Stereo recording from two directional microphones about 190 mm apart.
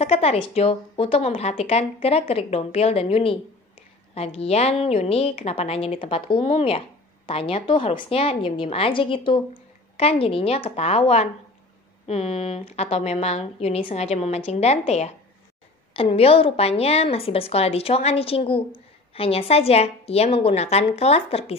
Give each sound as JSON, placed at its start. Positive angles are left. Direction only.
{"t": 0.0, "sound": "a woman's voice", "side_deg": 35}